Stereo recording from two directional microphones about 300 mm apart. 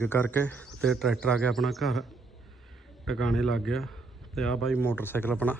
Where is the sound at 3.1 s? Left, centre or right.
Centre.